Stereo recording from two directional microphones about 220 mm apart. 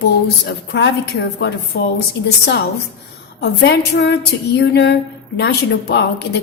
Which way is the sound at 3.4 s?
50° left (ahead or behind).